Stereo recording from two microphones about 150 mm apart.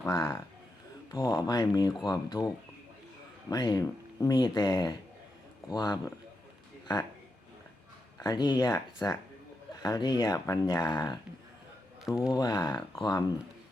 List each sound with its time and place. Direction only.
0.0 s speech: 20° left (ahead or behind)
3.5 s speech: 25° left (ahead or behind)
8.2 s speech: 25° left (ahead or behind)
12.0 s speech: 5° right (ahead or behind)
12.3 s speech: 25° left (ahead or behind)